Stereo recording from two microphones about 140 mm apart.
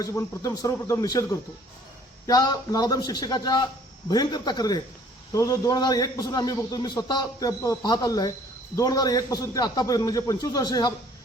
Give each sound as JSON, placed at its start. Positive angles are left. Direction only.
{"t": 0.0, "sound": "a man's voice", "side_deg": 20}